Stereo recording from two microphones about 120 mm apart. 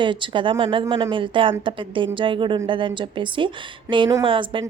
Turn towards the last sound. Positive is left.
turn(degrees=-45)  # may be behind; listen again after turning